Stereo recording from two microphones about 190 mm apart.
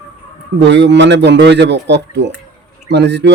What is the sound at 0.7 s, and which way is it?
Speech, 70° right (ahead or behind).